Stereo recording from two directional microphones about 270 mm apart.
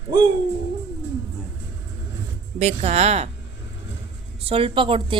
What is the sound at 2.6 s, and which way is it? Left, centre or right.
Speech, right.